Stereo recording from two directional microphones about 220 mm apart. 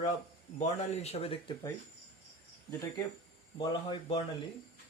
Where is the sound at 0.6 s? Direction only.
30° left (ahead or behind).